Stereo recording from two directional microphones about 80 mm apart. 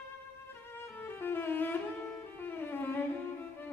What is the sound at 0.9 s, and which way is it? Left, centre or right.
Music, left.